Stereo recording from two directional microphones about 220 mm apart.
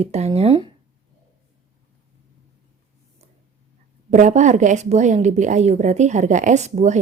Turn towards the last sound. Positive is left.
turn(degrees=-30)  # may be behind; listen again after turning